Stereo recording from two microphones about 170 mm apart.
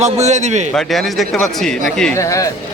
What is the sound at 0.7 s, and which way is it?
Speech, centre (ahead or behind).